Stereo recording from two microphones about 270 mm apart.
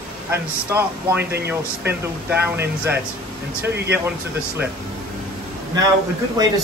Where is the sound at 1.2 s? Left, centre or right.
Right.